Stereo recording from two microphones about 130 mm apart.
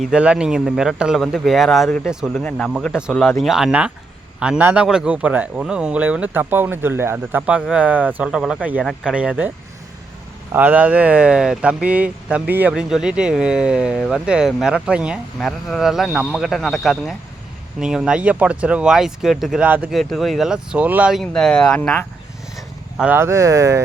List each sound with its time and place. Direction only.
0.0 s a man's voice: 10° right (ahead or behind)
2.4 s speech: 10° left (ahead or behind)
2.6 s a man's voice: 5° right (ahead or behind)
9.1 s speech: 10° right (ahead or behind)
10.5 s speech: 15° right (ahead or behind)
15.4 s a man's voice: 5° left (ahead or behind)
21.2 s a man's voice: 5° left (ahead or behind)
22.5 s vehicle: 5° right (ahead or behind)
23.1 s speech: 20° right (ahead or behind)